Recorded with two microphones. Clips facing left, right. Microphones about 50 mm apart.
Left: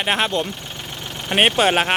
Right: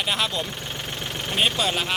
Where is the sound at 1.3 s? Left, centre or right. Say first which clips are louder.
Left 8 dB; left.